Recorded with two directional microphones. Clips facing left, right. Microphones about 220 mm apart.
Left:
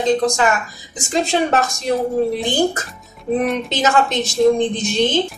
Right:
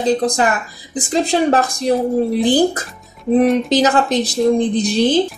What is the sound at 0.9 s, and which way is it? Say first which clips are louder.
Speech: right 2 dB; 35° right (ahead or behind).